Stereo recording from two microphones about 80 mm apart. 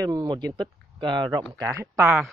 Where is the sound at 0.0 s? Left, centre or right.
Right.